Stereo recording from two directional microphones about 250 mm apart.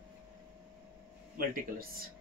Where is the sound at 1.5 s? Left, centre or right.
Right.